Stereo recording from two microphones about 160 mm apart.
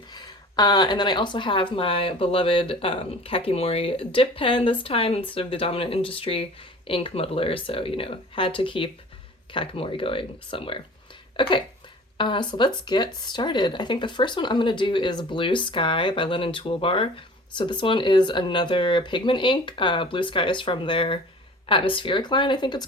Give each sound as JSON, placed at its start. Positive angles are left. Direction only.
{"t": 0.1, "sound": "speech", "side_deg": 25}
{"t": 11.3, "sound": "a sound", "side_deg": 30}
{"t": 12.1, "sound": "speech", "side_deg": 30}